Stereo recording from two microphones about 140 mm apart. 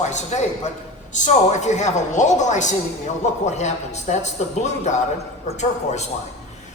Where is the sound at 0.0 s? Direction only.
55° left (ahead or behind).